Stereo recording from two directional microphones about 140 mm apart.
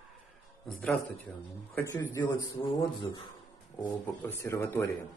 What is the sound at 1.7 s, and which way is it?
Speech, 15° left (ahead or behind).